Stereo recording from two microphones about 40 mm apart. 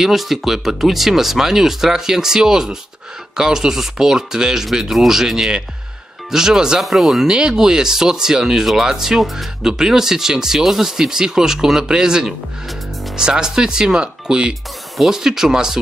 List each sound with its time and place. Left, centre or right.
0.0 s speech: centre
6.8 s speech: centre
7.3 s speech: centre